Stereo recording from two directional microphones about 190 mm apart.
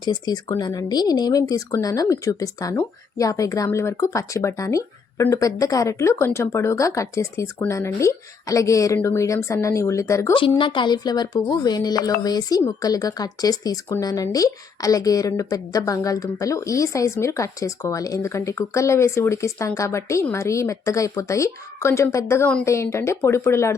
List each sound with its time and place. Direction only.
0.0 s speech: 20° left (ahead or behind)